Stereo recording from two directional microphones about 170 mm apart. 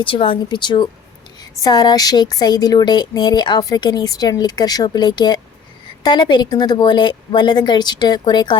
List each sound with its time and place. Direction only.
0.0 s speech: 30° left (ahead or behind)